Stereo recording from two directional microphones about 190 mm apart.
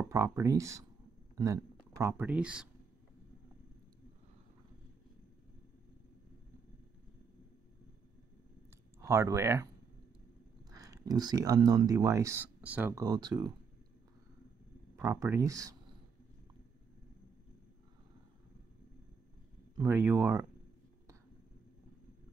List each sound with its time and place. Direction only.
0.0 s speech: 15° right (ahead or behind)
9.0 s speech: 15° right (ahead or behind)
10.7 s speech: 20° right (ahead or behind)
13.0 s speech: 20° right (ahead or behind)
15.0 s speech: 15° right (ahead or behind)
19.8 s speech: 10° right (ahead or behind)